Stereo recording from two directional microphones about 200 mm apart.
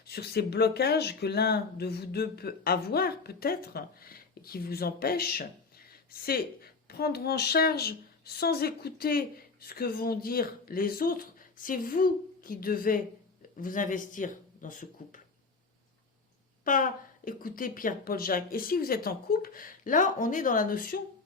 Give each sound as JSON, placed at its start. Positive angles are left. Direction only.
{"t": 0.1, "sound": "speech", "side_deg": 55}
{"t": 16.6, "sound": "speech", "side_deg": 40}